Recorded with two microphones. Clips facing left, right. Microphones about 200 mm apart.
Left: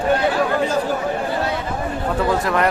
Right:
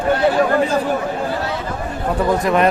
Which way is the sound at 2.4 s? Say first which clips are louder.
Right 4 dB; 20° right (ahead or behind).